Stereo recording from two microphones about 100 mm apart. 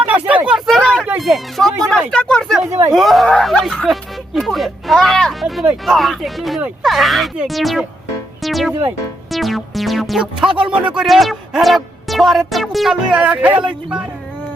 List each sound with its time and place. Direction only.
0.1 s a sound: 15° right (ahead or behind)
0.6 s a sound: 5° left (ahead or behind)
1.2 s speech: centre (ahead or behind)
2.6 s speech: 30° right (ahead or behind)
2.9 s speech: centre (ahead or behind)
8.4 s music: centre (ahead or behind)
9.3 s speech: centre (ahead or behind)